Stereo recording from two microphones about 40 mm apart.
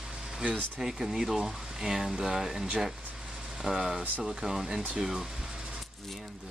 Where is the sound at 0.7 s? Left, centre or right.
Centre.